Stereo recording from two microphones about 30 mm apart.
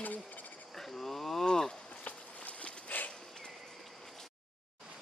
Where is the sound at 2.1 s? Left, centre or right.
Left.